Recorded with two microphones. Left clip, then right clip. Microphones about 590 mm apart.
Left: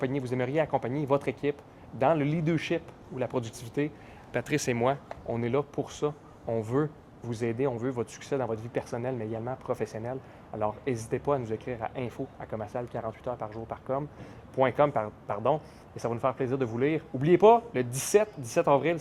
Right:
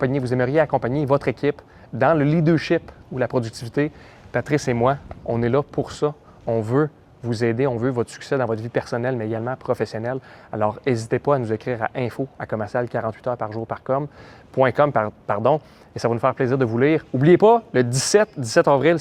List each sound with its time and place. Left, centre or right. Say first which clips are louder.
0.0 s speech: right 9 dB; right